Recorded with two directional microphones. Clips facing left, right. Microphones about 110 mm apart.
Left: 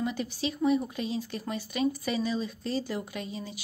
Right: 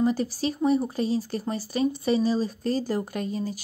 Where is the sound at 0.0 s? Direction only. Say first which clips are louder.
Right 7 dB; 40° right (ahead or behind).